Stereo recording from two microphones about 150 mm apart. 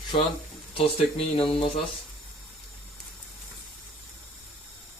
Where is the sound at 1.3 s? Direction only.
40° left (ahead or behind).